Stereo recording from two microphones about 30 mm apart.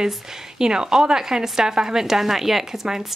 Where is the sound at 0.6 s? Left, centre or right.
Right.